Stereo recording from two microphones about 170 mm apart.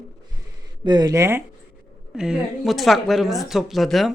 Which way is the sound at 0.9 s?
25° right (ahead or behind).